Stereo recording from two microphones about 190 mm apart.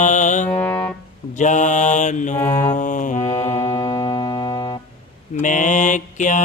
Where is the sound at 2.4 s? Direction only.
20° left (ahead or behind).